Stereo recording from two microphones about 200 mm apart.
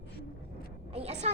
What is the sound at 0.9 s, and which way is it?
Speech, 30° right (ahead or behind).